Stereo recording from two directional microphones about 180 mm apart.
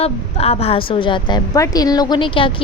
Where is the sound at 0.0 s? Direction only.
35° left (ahead or behind).